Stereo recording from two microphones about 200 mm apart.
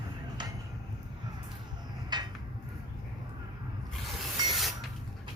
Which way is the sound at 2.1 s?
20° right (ahead or behind).